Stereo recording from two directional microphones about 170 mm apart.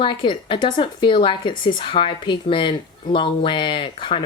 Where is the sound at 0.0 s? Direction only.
30° left (ahead or behind).